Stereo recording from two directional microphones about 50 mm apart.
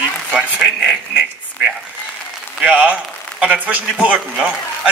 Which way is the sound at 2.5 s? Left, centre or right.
Right.